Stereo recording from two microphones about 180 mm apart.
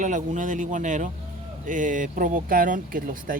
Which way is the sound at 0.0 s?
45° right (ahead or behind).